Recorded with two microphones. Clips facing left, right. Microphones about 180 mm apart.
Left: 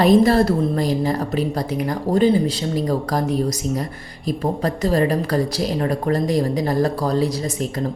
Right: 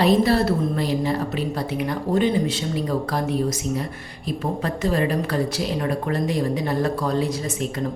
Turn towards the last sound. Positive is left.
turn(degrees=35)  # may be behind; listen again after turning